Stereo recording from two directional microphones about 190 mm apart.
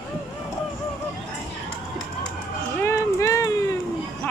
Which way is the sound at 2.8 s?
15° left (ahead or behind).